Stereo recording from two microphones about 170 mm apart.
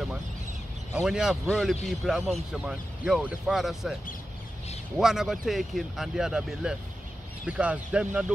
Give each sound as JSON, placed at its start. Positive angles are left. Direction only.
{"t": 0.9, "sound": "speech", "side_deg": -5}
{"t": 4.9, "sound": "speech", "side_deg": -5}